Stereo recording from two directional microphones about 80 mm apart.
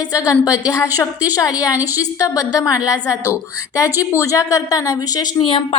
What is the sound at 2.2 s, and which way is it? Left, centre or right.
A woman's voice, left.